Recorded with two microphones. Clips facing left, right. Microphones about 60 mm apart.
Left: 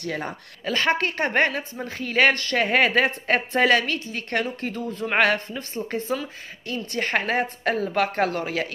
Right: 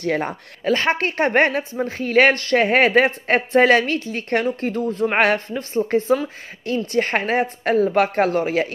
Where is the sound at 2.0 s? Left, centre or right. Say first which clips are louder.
Right 4 dB; right.